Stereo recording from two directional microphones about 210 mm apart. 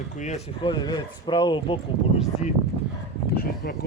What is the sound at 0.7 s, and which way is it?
Speech, 20° left (ahead or behind).